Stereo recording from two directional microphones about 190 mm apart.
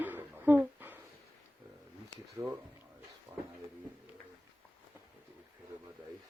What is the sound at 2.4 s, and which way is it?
Speech, 20° right (ahead or behind).